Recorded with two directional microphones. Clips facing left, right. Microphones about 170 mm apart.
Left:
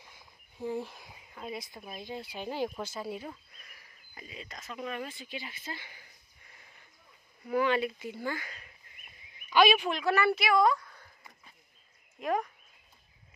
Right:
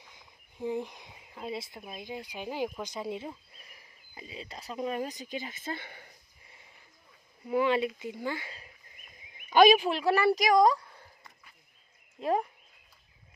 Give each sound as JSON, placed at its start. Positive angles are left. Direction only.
{"t": 0.1, "sound": "a sound", "side_deg": -20}
{"t": 1.8, "sound": "speech", "side_deg": -15}
{"t": 6.4, "sound": "a sound", "side_deg": -25}
{"t": 7.4, "sound": "speech", "side_deg": -25}
{"t": 9.5, "sound": "speech", "side_deg": -45}
{"t": 12.2, "sound": "speech", "side_deg": -30}